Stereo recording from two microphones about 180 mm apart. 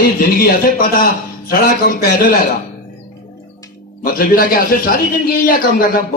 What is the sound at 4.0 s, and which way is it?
A man's voice, 55° left (ahead or behind).